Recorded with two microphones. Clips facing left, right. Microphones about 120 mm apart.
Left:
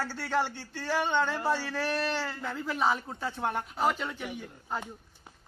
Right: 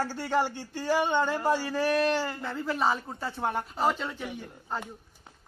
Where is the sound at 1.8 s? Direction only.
45° right (ahead or behind).